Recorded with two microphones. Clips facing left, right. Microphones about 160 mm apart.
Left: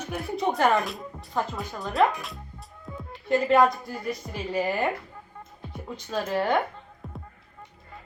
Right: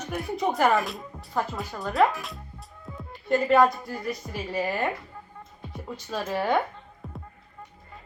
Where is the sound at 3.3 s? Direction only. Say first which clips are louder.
Even; centre (ahead or behind).